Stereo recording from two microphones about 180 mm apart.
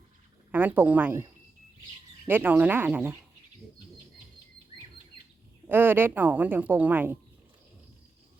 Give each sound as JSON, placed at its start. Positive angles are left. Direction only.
{"t": 0.5, "sound": "a woman's voice", "side_deg": -10}
{"t": 5.6, "sound": "a woman's voice", "side_deg": -10}